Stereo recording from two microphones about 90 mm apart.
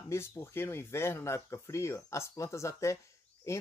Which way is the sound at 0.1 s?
30° left (ahead or behind).